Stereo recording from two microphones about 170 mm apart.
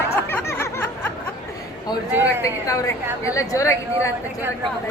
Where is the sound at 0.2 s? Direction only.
10° left (ahead or behind).